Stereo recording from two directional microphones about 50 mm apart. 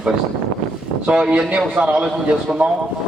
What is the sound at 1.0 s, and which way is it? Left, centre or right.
A man's voice, right.